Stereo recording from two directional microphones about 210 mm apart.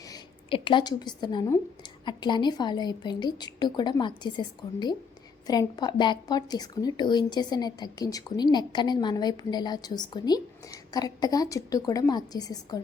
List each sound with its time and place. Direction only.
0.0 s a woman's voice: 20° left (ahead or behind)